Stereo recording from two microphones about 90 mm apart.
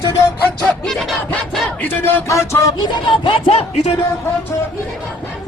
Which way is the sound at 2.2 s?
35° left (ahead or behind).